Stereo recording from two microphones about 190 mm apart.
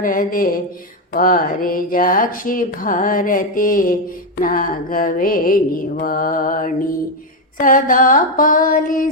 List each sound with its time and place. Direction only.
0.0 s speech: 45° left (ahead or behind)